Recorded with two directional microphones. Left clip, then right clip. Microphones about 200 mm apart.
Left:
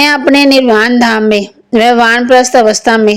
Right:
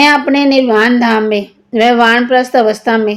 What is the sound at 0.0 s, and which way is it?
A woman's voice, 45° left (ahead or behind).